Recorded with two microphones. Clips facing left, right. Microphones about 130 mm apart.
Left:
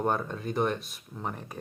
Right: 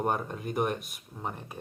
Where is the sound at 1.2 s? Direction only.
5° right (ahead or behind).